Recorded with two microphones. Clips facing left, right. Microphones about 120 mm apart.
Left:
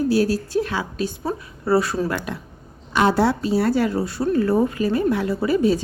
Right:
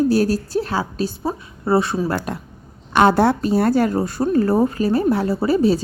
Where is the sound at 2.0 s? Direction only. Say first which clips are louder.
Right 2 dB; 40° right (ahead or behind).